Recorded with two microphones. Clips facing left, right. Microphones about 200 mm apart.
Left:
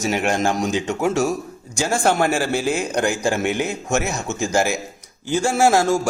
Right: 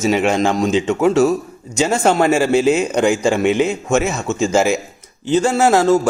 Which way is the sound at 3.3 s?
65° right (ahead or behind).